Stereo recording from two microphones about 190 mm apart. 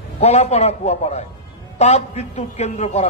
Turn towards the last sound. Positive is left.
turn(degrees=35)  # may be behind; listen again after turning